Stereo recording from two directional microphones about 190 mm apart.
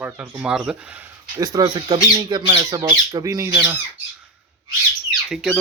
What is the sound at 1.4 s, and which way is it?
Speech, 20° right (ahead or behind).